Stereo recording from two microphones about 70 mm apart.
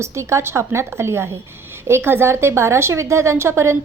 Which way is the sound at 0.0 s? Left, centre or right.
Right.